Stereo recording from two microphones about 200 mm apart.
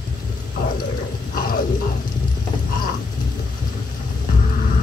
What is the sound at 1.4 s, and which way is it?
Music, 45° left (ahead or behind).